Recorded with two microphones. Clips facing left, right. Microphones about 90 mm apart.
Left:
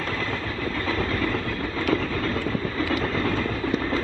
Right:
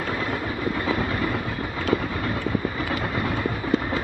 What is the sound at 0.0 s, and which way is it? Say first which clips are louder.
Train: right 2 dB; 15° right (ahead or behind).